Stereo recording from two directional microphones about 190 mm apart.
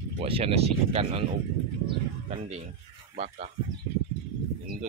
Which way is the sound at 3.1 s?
40° right (ahead or behind).